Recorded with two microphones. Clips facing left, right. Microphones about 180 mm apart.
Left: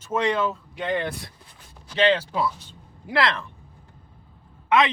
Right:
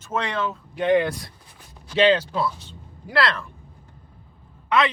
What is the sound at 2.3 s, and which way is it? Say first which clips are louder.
Speech: even; 15° left (ahead or behind).